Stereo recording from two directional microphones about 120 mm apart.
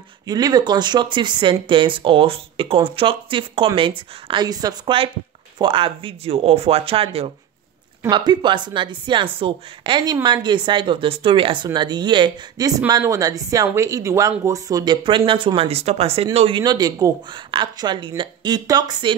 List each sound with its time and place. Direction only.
0.3 s speech: 35° right (ahead or behind)
5.6 s speech: 45° right (ahead or behind)
8.1 s speech: 40° right (ahead or behind)
16.6 s speech: 35° right (ahead or behind)